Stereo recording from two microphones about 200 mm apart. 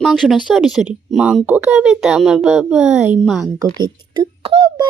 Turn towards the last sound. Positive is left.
turn(degrees=-25)  # may be behind; listen again after turning